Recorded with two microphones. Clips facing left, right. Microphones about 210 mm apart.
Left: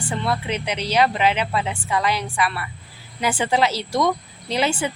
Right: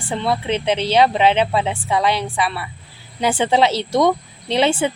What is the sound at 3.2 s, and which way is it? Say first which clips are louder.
A woman's voice: right 4 dB; 25° right (ahead or behind).